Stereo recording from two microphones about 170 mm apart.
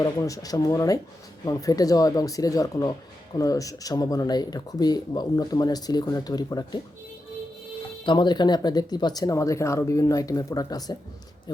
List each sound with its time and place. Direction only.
0.0 s speech: 20° left (ahead or behind)
8.0 s speech: 25° left (ahead or behind)